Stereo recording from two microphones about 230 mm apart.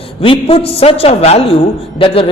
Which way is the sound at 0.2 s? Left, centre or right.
Left.